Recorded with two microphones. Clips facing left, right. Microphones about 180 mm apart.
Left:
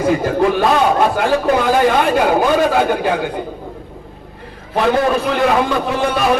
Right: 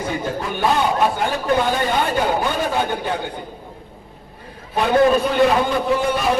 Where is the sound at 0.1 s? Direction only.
90° left.